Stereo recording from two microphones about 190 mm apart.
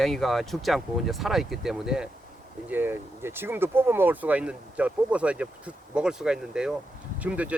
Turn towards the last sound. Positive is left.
turn(degrees=-5)  # may be behind; listen again after turning